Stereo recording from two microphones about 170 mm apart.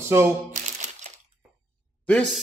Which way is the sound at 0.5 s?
45° right (ahead or behind).